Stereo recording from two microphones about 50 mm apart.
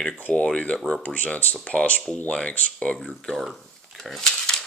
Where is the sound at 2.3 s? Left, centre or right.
Centre.